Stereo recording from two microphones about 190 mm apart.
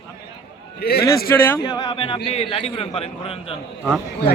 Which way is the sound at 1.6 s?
25° left (ahead or behind).